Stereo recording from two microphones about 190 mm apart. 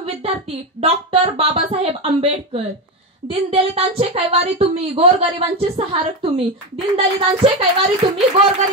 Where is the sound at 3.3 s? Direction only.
30° right (ahead or behind).